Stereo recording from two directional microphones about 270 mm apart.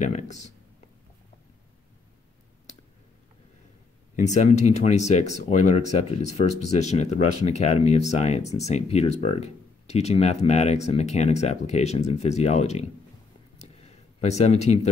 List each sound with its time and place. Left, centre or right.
0.0 s speech: left
4.2 s speech: left
13.6 s a sound: left